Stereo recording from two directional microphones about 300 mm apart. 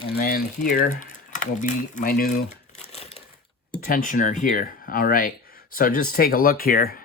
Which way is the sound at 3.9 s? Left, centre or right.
Left.